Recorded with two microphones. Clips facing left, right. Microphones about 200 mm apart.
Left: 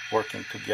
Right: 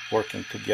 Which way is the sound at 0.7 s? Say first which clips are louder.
Right 3 dB; 20° right (ahead or behind).